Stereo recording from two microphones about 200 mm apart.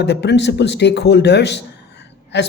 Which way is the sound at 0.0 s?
60° left (ahead or behind).